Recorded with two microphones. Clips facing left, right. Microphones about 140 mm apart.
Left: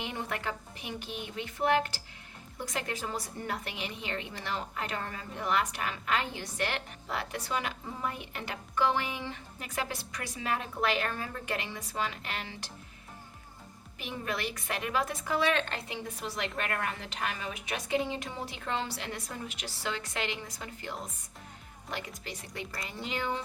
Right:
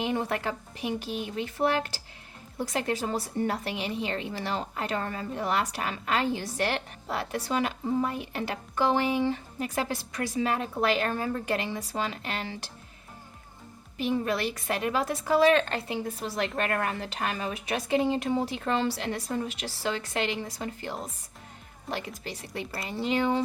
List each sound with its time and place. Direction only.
0.0 s a woman's voice: 35° right (ahead or behind)
2.6 s a woman's voice: 35° right (ahead or behind)
14.0 s a woman's voice: 35° right (ahead or behind)